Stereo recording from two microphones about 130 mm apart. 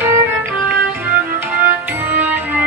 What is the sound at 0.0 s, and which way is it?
Music, 15° right (ahead or behind).